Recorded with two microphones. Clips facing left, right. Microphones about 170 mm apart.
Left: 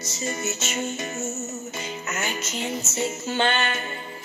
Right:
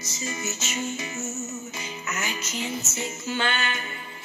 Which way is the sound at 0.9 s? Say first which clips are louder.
Left 2 dB; 45° left (ahead or behind).